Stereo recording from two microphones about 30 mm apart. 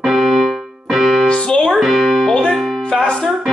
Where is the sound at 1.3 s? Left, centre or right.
Left.